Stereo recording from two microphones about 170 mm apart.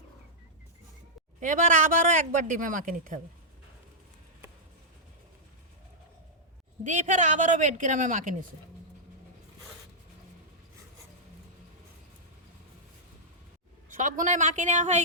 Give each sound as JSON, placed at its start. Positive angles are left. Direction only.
{"t": 1.4, "sound": "a man's voice", "side_deg": -50}
{"t": 6.8, "sound": "a man's voice", "side_deg": -45}
{"t": 13.9, "sound": "a man's voice", "side_deg": -50}